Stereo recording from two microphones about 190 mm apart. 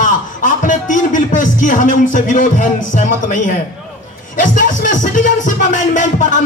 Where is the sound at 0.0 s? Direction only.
40° left (ahead or behind).